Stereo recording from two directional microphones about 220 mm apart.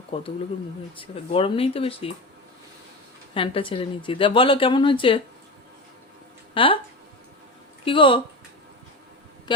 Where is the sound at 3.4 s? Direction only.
25° left (ahead or behind).